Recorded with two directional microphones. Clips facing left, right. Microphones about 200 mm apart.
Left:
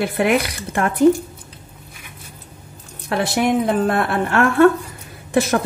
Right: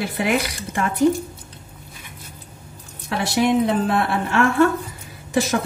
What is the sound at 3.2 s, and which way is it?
Speech, 55° left (ahead or behind).